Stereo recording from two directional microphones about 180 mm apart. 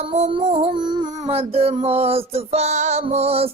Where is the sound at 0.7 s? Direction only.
25° right (ahead or behind).